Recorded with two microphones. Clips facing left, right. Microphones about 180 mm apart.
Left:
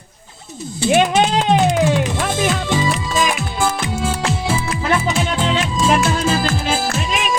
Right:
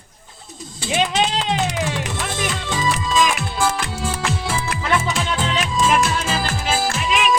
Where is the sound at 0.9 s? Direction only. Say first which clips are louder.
Left 6 dB; 55° left (ahead or behind).